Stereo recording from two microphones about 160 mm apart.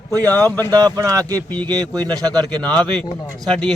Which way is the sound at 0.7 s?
25° right (ahead or behind).